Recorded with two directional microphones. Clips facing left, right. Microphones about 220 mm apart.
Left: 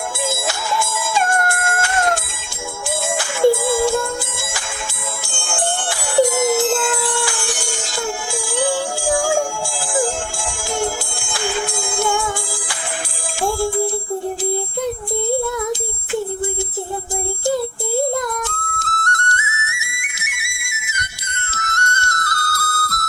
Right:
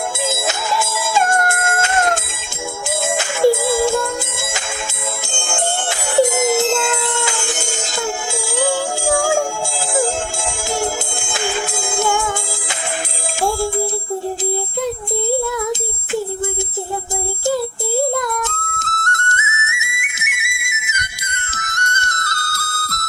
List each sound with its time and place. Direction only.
0.3 s music: 20° right (ahead or behind)
11.9 s music: 25° right (ahead or behind)
18.1 s music: 20° left (ahead or behind)
18.4 s flute: 25° right (ahead or behind)